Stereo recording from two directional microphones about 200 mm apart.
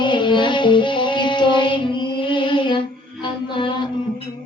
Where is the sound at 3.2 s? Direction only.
25° left (ahead or behind).